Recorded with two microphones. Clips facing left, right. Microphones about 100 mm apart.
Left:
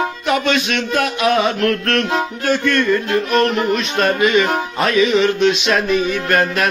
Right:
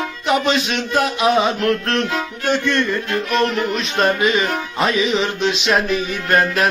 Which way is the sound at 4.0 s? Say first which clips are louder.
Left 1 dB; 30° right (ahead or behind).